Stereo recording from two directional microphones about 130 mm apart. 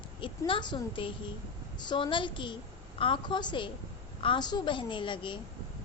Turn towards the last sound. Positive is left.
turn(degrees=40)  # may be behind; listen again after turning